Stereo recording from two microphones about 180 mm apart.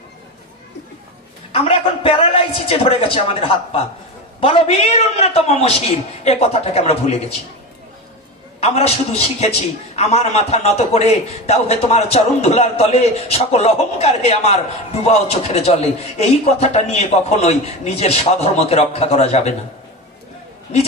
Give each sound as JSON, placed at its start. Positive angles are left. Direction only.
{"t": 1.5, "sound": "a man's voice", "side_deg": 35}
{"t": 8.5, "sound": "a man's voice", "side_deg": 35}